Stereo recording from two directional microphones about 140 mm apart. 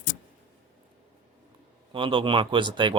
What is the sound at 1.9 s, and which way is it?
Speech, 40° right (ahead or behind).